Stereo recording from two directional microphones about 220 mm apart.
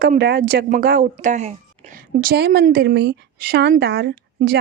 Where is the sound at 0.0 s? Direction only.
45° right (ahead or behind).